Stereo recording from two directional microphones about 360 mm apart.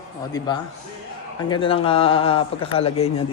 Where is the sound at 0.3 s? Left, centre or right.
Centre.